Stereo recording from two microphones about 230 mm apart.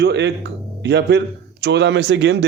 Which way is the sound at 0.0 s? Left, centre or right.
Right.